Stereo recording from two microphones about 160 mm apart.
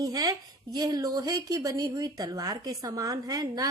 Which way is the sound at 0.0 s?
20° right (ahead or behind).